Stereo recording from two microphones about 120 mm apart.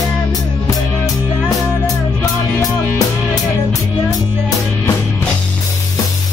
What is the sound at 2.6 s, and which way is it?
Music, 30° left (ahead or behind).